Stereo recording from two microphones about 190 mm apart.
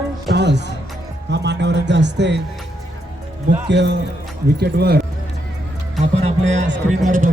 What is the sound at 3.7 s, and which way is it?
A man's voice, 65° right (ahead or behind).